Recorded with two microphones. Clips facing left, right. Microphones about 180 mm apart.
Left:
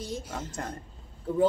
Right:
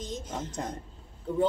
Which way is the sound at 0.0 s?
10° left (ahead or behind).